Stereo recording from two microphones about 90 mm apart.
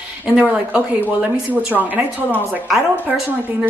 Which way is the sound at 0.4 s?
10° right (ahead or behind).